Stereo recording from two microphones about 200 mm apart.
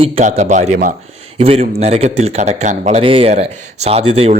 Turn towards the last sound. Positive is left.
turn(degrees=-30)  # may be behind; listen again after turning